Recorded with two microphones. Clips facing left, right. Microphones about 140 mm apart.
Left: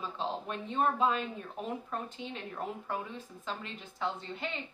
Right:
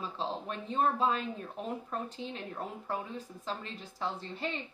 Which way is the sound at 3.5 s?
35° right (ahead or behind).